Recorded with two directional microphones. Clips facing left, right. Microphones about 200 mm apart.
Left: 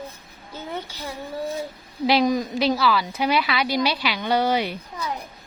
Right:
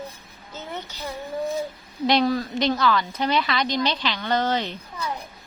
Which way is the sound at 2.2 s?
15° left (ahead or behind).